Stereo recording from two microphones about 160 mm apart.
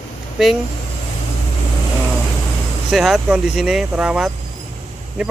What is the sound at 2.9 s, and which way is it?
Speech, centre (ahead or behind).